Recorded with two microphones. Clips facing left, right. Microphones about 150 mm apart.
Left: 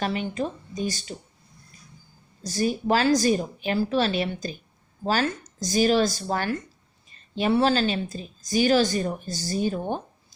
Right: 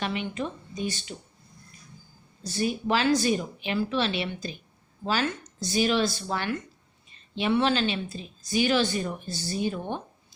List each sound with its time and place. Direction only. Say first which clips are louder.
0.0 s a woman's voice: left 3 dB; 40° left (ahead or behind)
2.4 s a woman's voice: left 3 dB; 40° left (ahead or behind)